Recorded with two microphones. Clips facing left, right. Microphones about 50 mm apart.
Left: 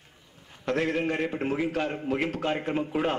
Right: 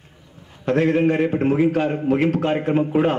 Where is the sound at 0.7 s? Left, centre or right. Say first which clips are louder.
Right 9 dB; centre.